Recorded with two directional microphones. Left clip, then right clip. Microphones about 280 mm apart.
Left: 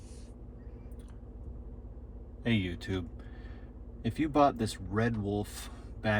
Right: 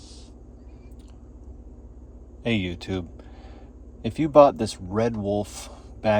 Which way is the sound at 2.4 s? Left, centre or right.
Centre.